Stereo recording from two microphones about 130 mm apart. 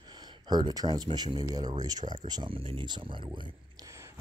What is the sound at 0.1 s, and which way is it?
Speech, 30° right (ahead or behind).